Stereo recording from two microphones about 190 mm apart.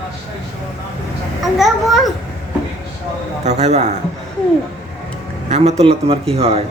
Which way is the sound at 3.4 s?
35° right (ahead or behind).